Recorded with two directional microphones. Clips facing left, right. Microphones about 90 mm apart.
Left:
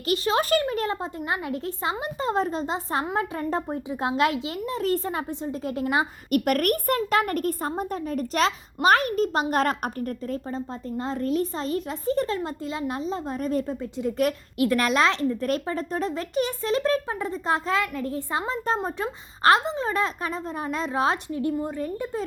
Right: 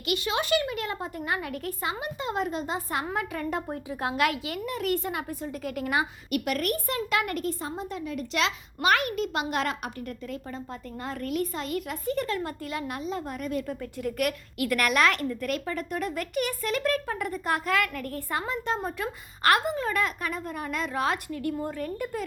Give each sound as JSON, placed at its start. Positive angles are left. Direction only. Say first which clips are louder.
{"t": 0.1, "sound": "a woman's voice", "louder": "left 4 dB", "side_deg": 40}
{"t": 6.3, "sound": "a woman's voice", "louder": "left 6 dB", "side_deg": 50}
{"t": 10.9, "sound": "a woman's voice", "louder": "left 5 dB", "side_deg": 25}